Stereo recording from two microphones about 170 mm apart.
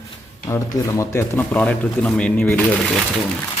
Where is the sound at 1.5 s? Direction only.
5° left (ahead or behind).